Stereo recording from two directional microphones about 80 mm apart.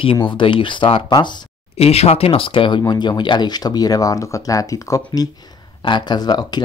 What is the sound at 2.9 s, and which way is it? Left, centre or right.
Speech, left.